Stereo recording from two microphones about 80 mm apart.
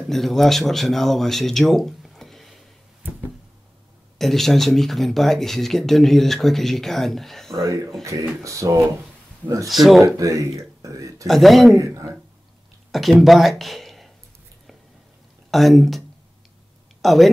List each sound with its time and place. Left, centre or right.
0.1 s speech: centre
4.2 s speech: centre
7.6 s speech: right
9.7 s speech: centre
10.0 s speech: right
11.2 s speech: centre
11.8 s speech: right
12.9 s speech: centre
15.5 s speech: centre
17.0 s a woman's voice: centre